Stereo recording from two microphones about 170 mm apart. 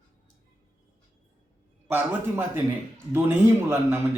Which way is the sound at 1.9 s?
10° right (ahead or behind).